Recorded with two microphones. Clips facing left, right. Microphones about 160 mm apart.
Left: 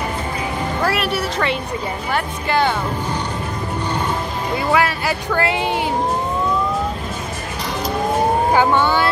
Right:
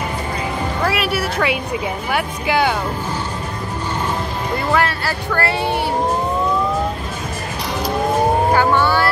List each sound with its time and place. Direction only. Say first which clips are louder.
0.8 s speech: right 1 dB; 5° right (ahead or behind)
4.7 s speech: left 1 dB; 10° left (ahead or behind)
8.5 s speech: even; 15° left (ahead or behind)